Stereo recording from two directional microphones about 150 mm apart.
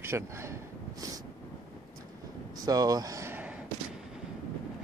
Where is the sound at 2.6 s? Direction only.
25° right (ahead or behind).